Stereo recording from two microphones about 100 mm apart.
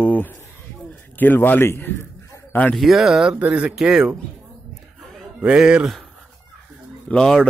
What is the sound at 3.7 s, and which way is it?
Speech, 5° right (ahead or behind).